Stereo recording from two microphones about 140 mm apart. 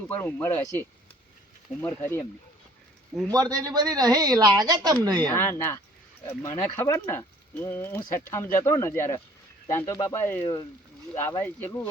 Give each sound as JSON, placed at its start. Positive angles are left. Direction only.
{"t": 0.0, "sound": "speech", "side_deg": 15}
{"t": 3.2, "sound": "speech", "side_deg": -25}
{"t": 5.3, "sound": "speech", "side_deg": 15}
{"t": 10.4, "sound": "speech", "side_deg": 35}
{"t": 11.2, "sound": "speech", "side_deg": 15}